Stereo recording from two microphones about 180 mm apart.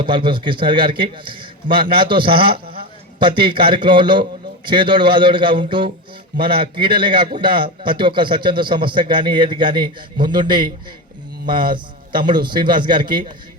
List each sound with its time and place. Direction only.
0.0 s a man's voice: 25° right (ahead or behind)